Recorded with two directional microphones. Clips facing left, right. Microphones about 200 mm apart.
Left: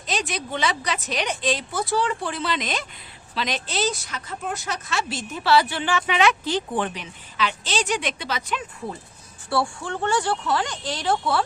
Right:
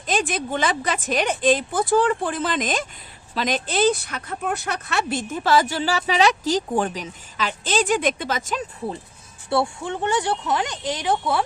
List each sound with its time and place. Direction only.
0.0 s speech: 50° right (ahead or behind)
9.5 s speech: 20° right (ahead or behind)